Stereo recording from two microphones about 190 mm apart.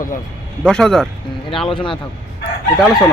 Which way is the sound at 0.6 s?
5° left (ahead or behind).